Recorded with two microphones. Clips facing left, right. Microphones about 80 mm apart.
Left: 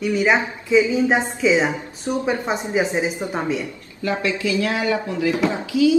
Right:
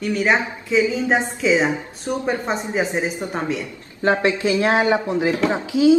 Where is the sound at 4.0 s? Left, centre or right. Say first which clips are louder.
Right 4 dB; right.